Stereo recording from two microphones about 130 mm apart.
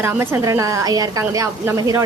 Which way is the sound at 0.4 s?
30° right (ahead or behind).